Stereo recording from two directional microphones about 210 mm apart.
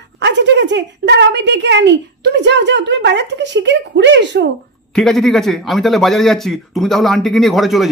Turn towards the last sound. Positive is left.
turn(degrees=0)  # may be behind; listen again after turning